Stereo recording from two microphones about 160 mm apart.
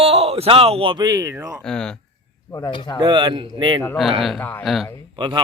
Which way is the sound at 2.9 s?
30° right (ahead or behind).